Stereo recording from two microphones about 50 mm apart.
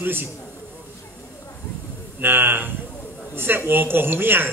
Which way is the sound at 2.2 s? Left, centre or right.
Right.